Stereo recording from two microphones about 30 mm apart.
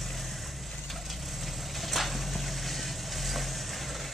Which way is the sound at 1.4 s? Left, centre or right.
Centre.